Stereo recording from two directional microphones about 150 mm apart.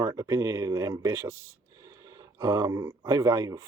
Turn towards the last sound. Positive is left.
turn(degrees=-25)  # may be behind; listen again after turning